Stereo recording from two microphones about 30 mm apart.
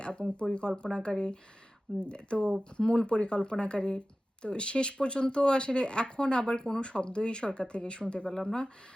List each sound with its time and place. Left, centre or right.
0.0 s speech: left
8.3 s speech: centre